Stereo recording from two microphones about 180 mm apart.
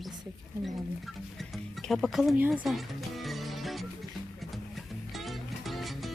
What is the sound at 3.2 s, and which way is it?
Music, centre (ahead or behind).